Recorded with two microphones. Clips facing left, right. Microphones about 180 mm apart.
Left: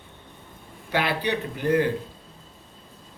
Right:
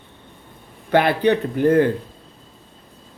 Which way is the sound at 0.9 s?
50° right (ahead or behind).